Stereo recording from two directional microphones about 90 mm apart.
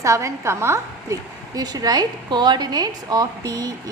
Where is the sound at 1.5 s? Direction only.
45° right (ahead or behind).